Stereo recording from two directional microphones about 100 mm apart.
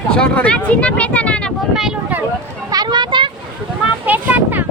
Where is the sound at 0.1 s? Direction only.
10° left (ahead or behind).